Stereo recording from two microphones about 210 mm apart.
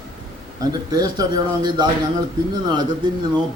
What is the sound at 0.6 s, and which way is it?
Speech, 20° right (ahead or behind).